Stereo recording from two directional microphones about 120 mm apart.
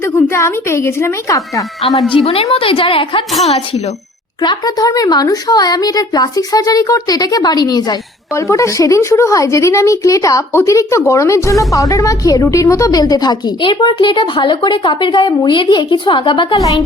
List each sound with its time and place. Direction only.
0.0 s a child's voice: 25° left (ahead or behind)
2.0 s a woman's voice: 50° left (ahead or behind)
4.4 s a woman's voice: 35° left (ahead or behind)
16.6 s a child's voice: 30° left (ahead or behind)